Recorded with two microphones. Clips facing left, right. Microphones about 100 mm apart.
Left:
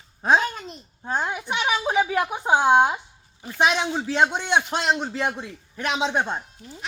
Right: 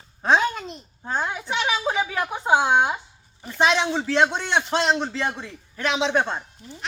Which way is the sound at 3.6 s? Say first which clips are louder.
Right 1 dB; 10° left (ahead or behind).